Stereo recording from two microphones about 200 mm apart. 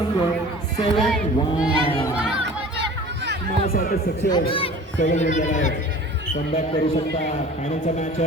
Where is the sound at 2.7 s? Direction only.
60° right (ahead or behind).